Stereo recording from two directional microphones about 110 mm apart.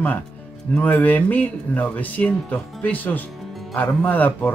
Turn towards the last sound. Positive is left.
turn(degrees=15)  # may be behind; listen again after turning